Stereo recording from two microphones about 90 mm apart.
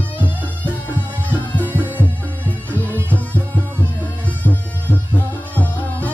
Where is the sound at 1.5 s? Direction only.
20° left (ahead or behind).